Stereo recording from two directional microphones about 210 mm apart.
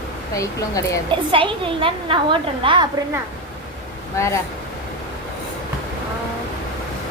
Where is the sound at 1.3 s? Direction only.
25° right (ahead or behind).